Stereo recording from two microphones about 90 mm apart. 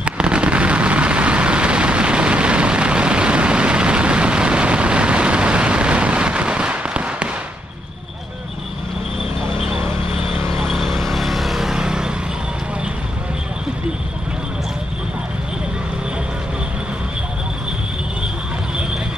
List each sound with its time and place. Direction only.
0.0 s vehicle: 10° right (ahead or behind)
10.3 s a sound: 30° right (ahead or behind)
10.7 s vehicle: centre (ahead or behind)